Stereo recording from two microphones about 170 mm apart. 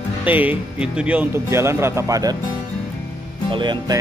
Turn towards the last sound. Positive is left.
turn(degrees=-25)  # may be behind; listen again after turning